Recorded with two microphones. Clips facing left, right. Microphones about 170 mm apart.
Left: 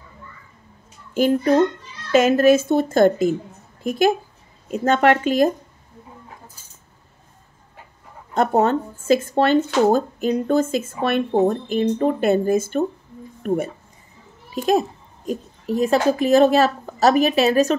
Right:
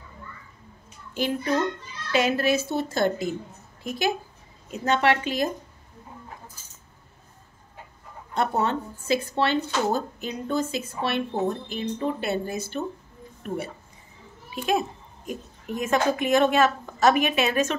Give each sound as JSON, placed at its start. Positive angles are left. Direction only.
{"t": 1.1, "sound": "speech", "side_deg": 45}
{"t": 4.6, "sound": "speech", "side_deg": 50}
{"t": 8.4, "sound": "speech", "side_deg": 45}
{"t": 14.5, "sound": "a woman's voice", "side_deg": 35}